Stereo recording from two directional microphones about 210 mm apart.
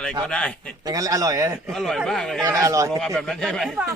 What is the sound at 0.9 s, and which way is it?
Speech, 15° right (ahead or behind).